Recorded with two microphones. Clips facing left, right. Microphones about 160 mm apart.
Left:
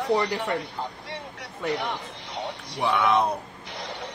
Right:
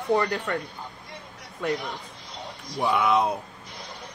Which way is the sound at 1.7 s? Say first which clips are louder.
Left 2 dB; 80° left.